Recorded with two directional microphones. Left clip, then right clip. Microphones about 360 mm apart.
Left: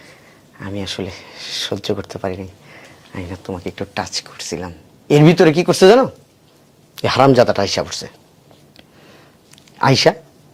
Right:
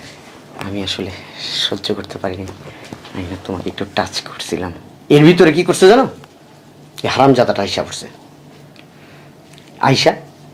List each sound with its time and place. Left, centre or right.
0.7 s speech: left
9.7 s speech: left